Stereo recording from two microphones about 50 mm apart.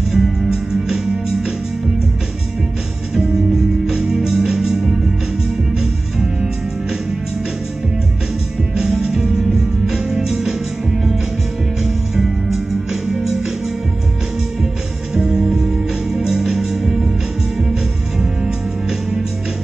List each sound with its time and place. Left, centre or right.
0.1 s music: centre
3.2 s music: centre
8.7 s music: centre
15.1 s music: centre
18.2 s music: centre